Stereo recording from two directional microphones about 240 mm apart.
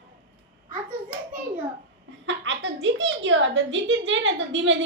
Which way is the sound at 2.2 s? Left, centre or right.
Right.